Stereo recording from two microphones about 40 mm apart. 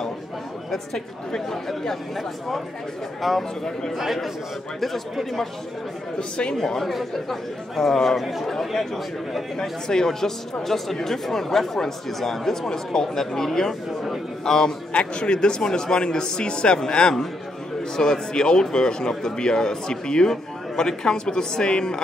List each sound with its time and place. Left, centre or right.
0.7 s speech: centre
3.2 s speech: centre
6.1 s speech: left
6.5 s speech: centre
8.2 s speech: centre
9.6 s a man's voice: centre
14.9 s speech: left